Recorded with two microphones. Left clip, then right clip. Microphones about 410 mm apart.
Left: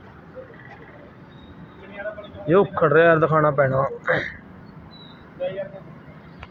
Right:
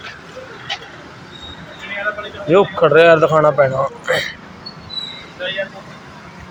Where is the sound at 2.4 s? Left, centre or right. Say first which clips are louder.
Right 5 dB; left.